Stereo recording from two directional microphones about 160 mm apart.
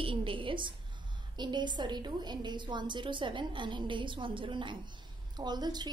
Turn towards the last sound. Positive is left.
turn(degrees=-25)  # may be behind; listen again after turning